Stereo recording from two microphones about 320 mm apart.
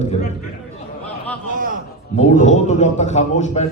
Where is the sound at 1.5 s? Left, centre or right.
Right.